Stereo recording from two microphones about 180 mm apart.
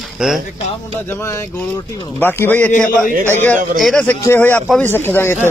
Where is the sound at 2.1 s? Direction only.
10° left (ahead or behind).